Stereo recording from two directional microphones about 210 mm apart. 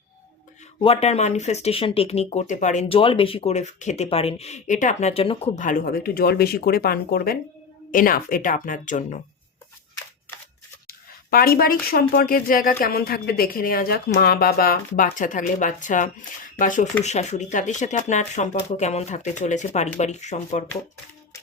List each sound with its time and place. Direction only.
0.8 s speech: 30° left (ahead or behind)
10.8 s speech: 45° left (ahead or behind)